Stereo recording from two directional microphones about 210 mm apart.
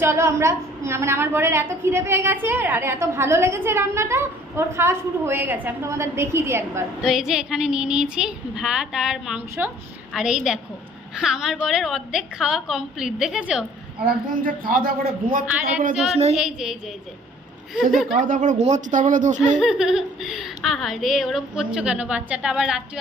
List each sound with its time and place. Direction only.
0.0 s a woman's voice: 15° right (ahead or behind)
14.4 s speech: 40° right (ahead or behind)
15.4 s a woman's voice: 10° right (ahead or behind)
16.1 s a woman's voice: 30° right (ahead or behind)
16.4 s speech: 5° right (ahead or behind)
18.3 s speech: 35° right (ahead or behind)
19.5 s speech: centre (ahead or behind)